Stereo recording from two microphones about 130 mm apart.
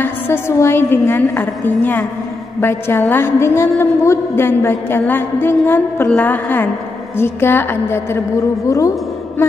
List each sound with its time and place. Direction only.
0.0 s a woman's voice: 20° left (ahead or behind)